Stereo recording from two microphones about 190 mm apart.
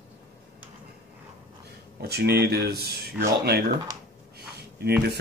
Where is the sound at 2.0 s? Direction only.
60° right (ahead or behind).